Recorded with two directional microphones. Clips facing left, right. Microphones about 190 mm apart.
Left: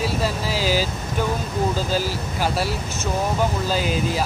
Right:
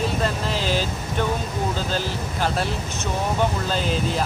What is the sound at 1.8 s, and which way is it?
Speech, 5° left (ahead or behind).